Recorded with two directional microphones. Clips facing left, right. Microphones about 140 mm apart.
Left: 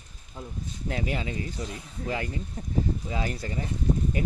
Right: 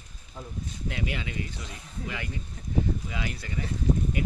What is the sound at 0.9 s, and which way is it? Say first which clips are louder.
Speech: left 4 dB; 35° left (ahead or behind).